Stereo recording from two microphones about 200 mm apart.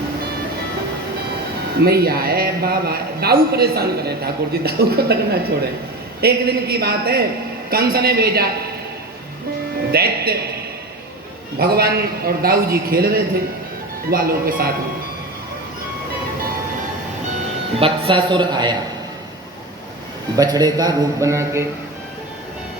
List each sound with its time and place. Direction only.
1.8 s a man's voice: 50° right (ahead or behind)
9.9 s a man's voice: 50° right (ahead or behind)
11.6 s a man's voice: 50° right (ahead or behind)
17.7 s a man's voice: 25° right (ahead or behind)
20.3 s a man's voice: 20° right (ahead or behind)